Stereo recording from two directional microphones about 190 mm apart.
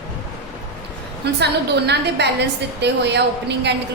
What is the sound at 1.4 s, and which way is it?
A woman's voice, 60° right (ahead or behind).